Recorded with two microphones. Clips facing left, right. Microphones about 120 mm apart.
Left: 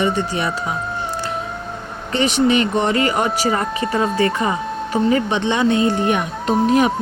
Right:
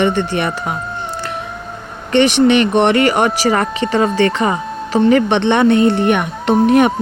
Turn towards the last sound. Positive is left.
turn(degrees=-65)  # may be behind; listen again after turning